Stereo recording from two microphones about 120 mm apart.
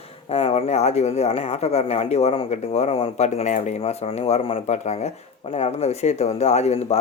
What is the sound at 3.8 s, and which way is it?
Speech, 55° left (ahead or behind).